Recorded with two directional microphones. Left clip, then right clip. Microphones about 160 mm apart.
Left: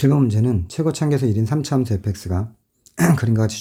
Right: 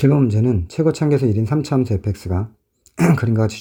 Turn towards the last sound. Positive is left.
turn(degrees=-20)  # may be behind; listen again after turning